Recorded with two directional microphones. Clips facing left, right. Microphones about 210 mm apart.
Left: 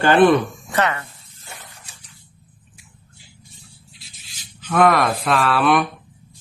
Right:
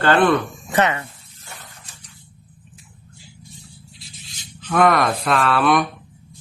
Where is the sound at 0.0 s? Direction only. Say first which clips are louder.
Left 3 dB; 15° left (ahead or behind).